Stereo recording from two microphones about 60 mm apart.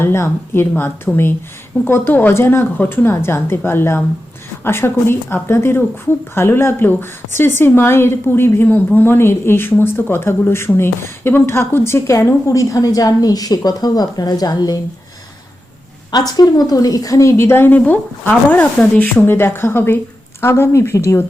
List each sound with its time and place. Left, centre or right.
0.0 s a woman's voice: left
12.5 s a woman's voice: left
16.2 s a woman's voice: left
17.3 s a woman's voice: left